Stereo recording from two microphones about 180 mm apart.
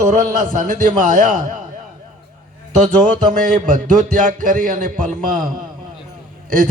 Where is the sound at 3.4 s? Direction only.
50° right (ahead or behind).